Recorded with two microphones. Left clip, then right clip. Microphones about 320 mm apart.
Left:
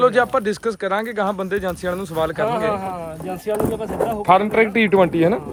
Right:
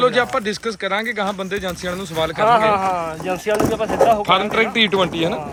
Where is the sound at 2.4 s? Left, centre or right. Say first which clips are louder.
Right 6 dB; centre.